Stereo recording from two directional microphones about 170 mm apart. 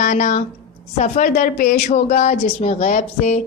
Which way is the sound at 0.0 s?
45° left (ahead or behind).